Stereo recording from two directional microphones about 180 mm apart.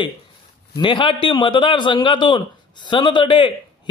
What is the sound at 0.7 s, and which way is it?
A man's voice, 25° left (ahead or behind).